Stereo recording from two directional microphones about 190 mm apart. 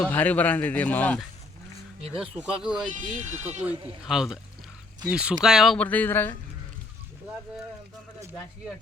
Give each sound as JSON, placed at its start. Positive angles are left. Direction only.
{"t": 0.0, "sound": "speech", "side_deg": 10}
{"t": 2.9, "sound": "speech", "side_deg": -40}
{"t": 4.0, "sound": "speech", "side_deg": -5}